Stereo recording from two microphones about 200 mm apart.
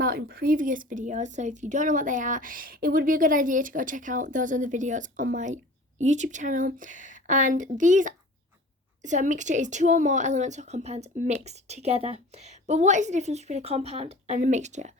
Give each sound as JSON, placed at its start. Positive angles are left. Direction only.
{"t": 0.0, "sound": "speech", "side_deg": -50}